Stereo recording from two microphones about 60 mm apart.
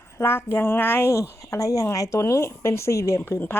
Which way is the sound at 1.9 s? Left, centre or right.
Left.